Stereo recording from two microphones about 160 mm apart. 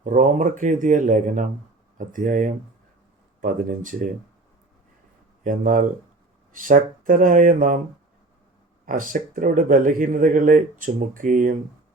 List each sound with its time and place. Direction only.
0.0 s speech: 55° right (ahead or behind)
5.4 s speech: 60° right (ahead or behind)
8.9 s speech: 55° right (ahead or behind)